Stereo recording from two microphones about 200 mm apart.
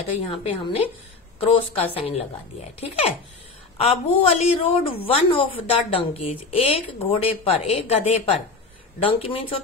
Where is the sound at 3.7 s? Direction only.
30° left (ahead or behind).